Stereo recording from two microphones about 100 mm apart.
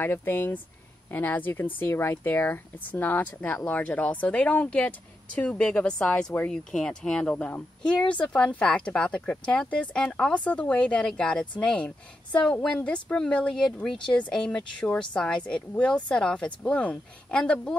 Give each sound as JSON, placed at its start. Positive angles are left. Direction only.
{"t": 0.0, "sound": "speech", "side_deg": 20}